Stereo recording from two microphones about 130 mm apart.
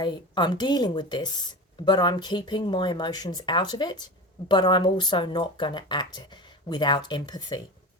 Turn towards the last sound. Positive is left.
turn(degrees=35)  # may be behind; listen again after turning